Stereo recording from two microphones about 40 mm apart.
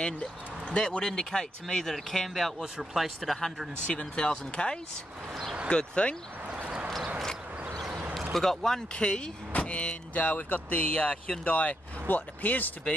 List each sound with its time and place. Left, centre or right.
0.0 s speech: centre
2.6 s speech: centre
3.8 s speech: left
6.6 s a sound: right
8.3 s speech: centre
8.9 s speech: left
10.2 s speech: left